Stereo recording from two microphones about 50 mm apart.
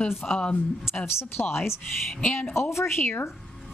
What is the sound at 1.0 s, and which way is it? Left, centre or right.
A woman's voice, left.